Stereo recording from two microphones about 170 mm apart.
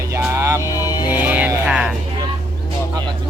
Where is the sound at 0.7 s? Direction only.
20° left (ahead or behind).